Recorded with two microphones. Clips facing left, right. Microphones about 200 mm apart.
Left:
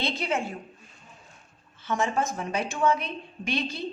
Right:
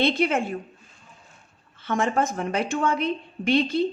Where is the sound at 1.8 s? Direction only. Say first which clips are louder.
Right 3 dB; 60° right (ahead or behind).